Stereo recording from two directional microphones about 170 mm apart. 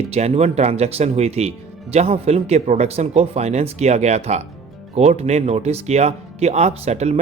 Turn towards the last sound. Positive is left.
turn(degrees=-40)  # may be behind; listen again after turning